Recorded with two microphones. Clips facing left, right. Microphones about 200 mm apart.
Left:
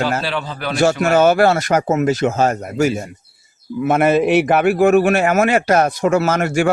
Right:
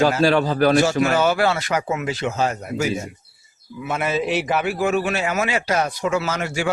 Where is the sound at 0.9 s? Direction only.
45° left (ahead or behind).